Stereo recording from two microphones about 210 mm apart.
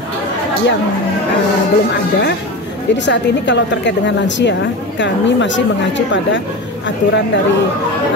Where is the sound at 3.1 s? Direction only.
55° left (ahead or behind).